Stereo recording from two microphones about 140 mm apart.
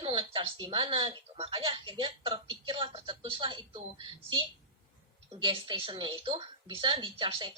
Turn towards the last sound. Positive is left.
turn(degrees=-35)  # may be behind; listen again after turning